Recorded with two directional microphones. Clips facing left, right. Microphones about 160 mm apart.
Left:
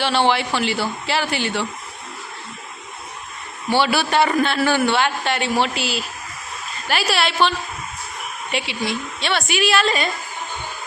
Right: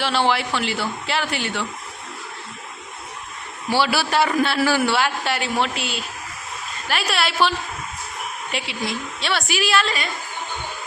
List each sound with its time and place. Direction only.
0.0 s a man's voice: centre (ahead or behind)
3.7 s a man's voice: 5° right (ahead or behind)
8.5 s a man's voice: centre (ahead or behind)